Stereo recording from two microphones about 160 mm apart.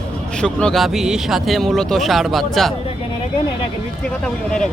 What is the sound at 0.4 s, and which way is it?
Speech, 5° left (ahead or behind).